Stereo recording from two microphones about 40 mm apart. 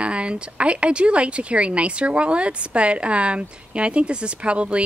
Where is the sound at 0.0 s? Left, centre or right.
Right.